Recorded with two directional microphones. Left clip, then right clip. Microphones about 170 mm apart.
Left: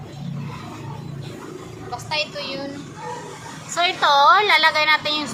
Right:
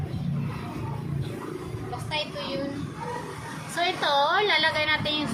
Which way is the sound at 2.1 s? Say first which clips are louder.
Left 5 dB; 20° right (ahead or behind).